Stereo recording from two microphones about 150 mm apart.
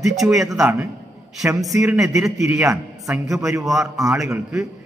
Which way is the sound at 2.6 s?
20° right (ahead or behind).